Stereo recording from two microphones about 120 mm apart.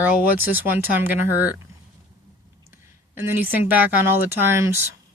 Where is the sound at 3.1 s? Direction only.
15° right (ahead or behind).